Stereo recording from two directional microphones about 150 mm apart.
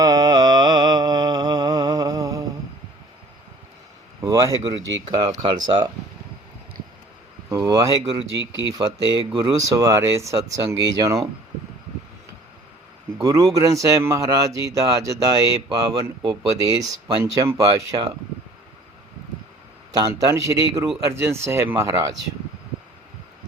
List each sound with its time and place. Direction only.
0.0 s mantra: 25° right (ahead or behind)
4.2 s a sound: 25° right (ahead or behind)
5.1 s speech: 30° right (ahead or behind)
7.5 s speech: 25° right (ahead or behind)
13.2 s speech: 20° right (ahead or behind)
19.9 s speech: 25° right (ahead or behind)